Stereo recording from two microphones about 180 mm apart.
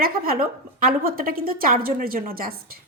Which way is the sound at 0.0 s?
55° right (ahead or behind).